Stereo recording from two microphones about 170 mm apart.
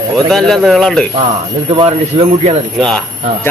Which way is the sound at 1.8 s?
35° right (ahead or behind).